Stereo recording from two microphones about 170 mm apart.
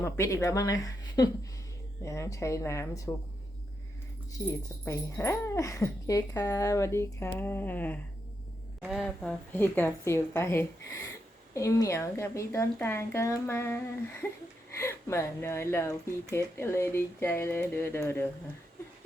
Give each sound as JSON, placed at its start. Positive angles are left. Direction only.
{"t": 0.0, "sound": "speech", "side_deg": 15}
{"t": 4.4, "sound": "speech", "side_deg": 15}
{"t": 8.8, "sound": "speech", "side_deg": -5}
{"t": 9.0, "sound": "speech", "side_deg": 10}